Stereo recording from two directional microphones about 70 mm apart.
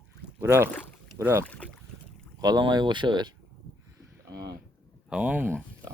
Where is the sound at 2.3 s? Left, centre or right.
Right.